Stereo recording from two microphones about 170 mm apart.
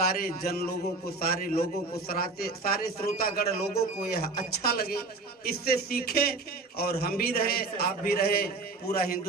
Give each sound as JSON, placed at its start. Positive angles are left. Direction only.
{"t": 0.1, "sound": "a man's voice", "side_deg": 65}